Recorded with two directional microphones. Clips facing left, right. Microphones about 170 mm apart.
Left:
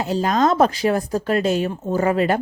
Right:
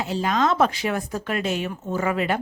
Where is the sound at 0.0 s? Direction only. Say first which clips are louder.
Left 4 dB; 40° left (ahead or behind).